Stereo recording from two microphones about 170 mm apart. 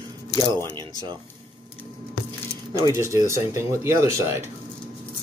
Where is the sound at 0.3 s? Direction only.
20° left (ahead or behind).